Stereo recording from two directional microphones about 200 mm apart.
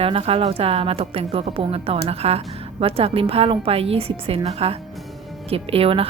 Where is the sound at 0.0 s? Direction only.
30° right (ahead or behind).